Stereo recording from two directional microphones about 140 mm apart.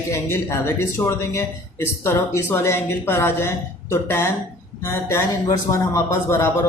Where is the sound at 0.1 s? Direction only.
20° left (ahead or behind).